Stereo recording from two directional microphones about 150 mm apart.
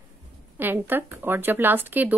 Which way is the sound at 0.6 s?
15° right (ahead or behind).